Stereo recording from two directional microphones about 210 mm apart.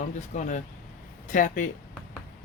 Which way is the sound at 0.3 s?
35° left (ahead or behind).